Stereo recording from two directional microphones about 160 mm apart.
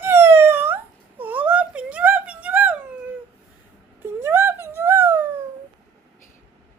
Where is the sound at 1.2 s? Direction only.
10° right (ahead or behind).